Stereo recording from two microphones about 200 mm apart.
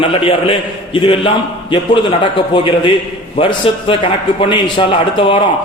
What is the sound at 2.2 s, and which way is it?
A man's voice, 25° left (ahead or behind).